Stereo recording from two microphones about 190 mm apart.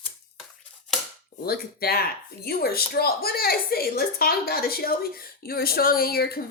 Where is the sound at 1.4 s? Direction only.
55° left (ahead or behind).